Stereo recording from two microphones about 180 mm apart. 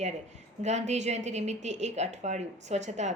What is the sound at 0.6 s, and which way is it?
A woman's voice, 40° right (ahead or behind).